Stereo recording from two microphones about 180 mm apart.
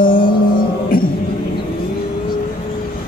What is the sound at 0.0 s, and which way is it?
Music, 50° left (ahead or behind).